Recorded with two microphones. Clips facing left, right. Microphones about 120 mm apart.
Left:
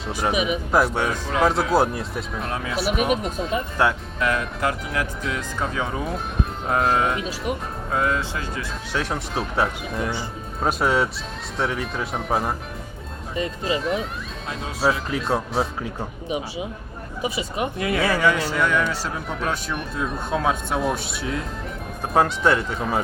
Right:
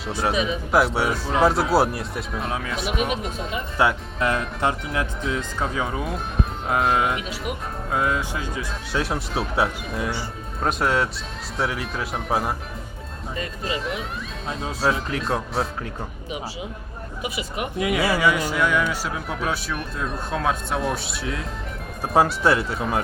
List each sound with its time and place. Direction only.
0.1 s speech: 15° left (ahead or behind)
0.7 s speech: 5° right (ahead or behind)
4.2 s speech: 30° right (ahead or behind)
5.5 s speech: 10° right (ahead or behind)
7.9 s speech: 15° right (ahead or behind)
13.3 s speech: 25° left (ahead or behind)
14.8 s speech: centre (ahead or behind)
17.2 s speech: 25° left (ahead or behind)
17.7 s speech: 15° right (ahead or behind)